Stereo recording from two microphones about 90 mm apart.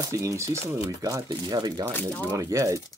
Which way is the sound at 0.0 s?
35° right (ahead or behind).